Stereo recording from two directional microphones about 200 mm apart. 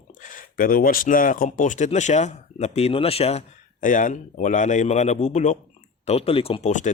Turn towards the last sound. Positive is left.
turn(degrees=35)  # may be behind; listen again after turning